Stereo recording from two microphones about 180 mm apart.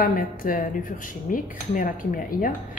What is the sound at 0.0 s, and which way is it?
A woman's voice, 50° left (ahead or behind).